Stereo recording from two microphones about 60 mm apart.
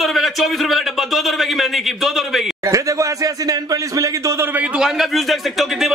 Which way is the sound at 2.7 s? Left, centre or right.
Right.